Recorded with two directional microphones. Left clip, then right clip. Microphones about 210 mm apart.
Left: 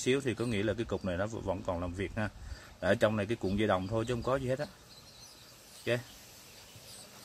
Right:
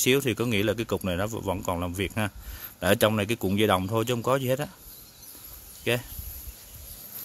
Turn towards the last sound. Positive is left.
turn(degrees=-45)  # may be behind; listen again after turning